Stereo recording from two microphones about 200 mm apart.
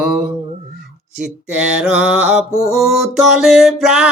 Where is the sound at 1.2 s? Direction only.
5° right (ahead or behind).